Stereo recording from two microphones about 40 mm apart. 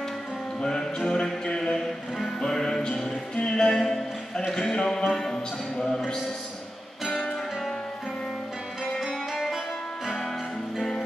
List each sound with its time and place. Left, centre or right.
0.6 s music: centre
4.5 s speech: centre
7.1 s music: centre